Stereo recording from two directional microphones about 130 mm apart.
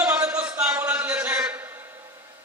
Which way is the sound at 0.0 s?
15° right (ahead or behind).